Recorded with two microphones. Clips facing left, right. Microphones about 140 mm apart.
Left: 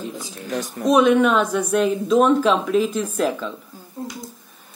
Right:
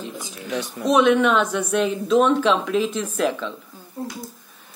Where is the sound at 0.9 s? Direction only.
5° left (ahead or behind).